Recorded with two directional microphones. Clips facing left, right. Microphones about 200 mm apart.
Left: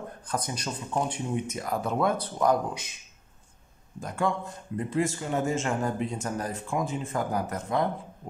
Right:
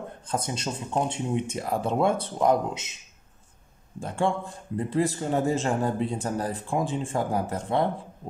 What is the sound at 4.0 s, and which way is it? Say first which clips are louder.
Speech: right 2 dB; 30° right (ahead or behind).